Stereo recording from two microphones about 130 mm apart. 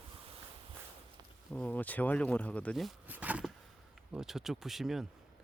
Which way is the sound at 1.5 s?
10° left (ahead or behind).